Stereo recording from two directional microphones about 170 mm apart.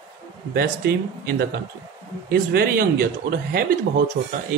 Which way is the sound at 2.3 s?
65° right (ahead or behind).